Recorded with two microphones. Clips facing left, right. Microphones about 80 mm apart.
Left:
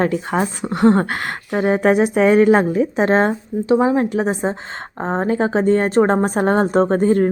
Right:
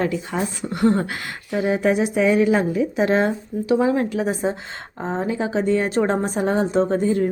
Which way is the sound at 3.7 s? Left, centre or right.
Left.